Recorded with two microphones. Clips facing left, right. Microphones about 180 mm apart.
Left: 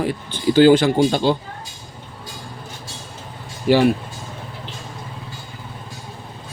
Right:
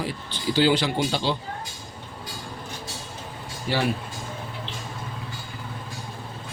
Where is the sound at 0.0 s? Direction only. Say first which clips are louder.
Left 8 dB; 50° left (ahead or behind).